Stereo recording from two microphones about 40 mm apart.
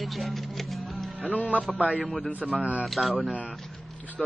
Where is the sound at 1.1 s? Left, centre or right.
Right.